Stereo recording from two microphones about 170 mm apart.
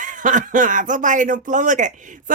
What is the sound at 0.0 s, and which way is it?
Speech, 50° right (ahead or behind).